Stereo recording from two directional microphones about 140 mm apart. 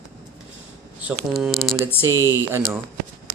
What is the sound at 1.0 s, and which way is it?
Speech, 10° right (ahead or behind).